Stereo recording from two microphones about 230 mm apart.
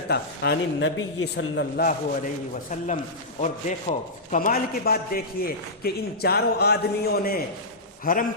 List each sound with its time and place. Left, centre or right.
0.1 s a man's voice: left